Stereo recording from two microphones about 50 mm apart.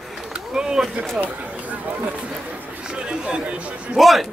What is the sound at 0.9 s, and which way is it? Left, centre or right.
Speech, right.